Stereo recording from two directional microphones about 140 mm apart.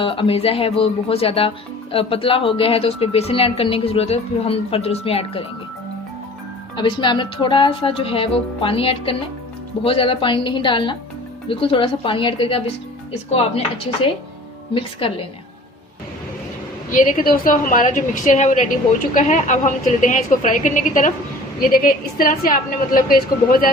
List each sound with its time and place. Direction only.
0.0 s speech: 40° left (ahead or behind)
7.0 s speech: 35° left (ahead or behind)
14.7 s speech: 40° left (ahead or behind)
16.9 s a woman's voice: 70° left (ahead or behind)
21.7 s a woman's voice: 90° left